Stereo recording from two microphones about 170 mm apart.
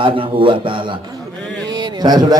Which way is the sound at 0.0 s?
30° right (ahead or behind).